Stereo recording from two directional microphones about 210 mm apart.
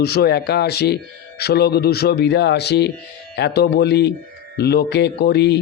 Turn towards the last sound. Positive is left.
turn(degrees=55)  # may be behind; listen again after turning